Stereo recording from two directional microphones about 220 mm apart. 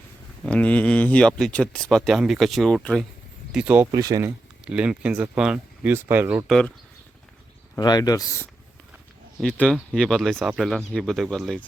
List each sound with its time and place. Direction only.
0.4 s speech: 5° left (ahead or behind); by 4.3 s 15° right (ahead or behind)
4.6 s speech: 5° right (ahead or behind)
7.8 s speech: 20° left (ahead or behind); by 11.6 s centre (ahead or behind)